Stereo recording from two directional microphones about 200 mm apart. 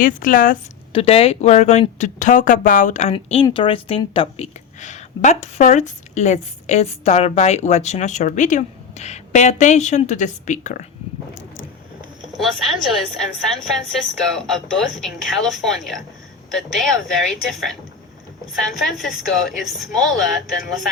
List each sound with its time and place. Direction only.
0.0 s speech: 45° left (ahead or behind)
0.9 s a woman's voice: 30° left (ahead or behind)
12.4 s a woman's voice: centre (ahead or behind)